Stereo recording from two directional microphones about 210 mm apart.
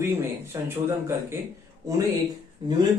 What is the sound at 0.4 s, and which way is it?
Speech, 10° right (ahead or behind).